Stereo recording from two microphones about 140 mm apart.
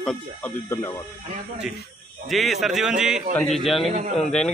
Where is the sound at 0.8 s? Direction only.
25° left (ahead or behind).